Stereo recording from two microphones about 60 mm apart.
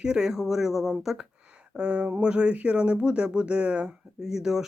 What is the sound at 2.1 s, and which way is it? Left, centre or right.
Speech, right.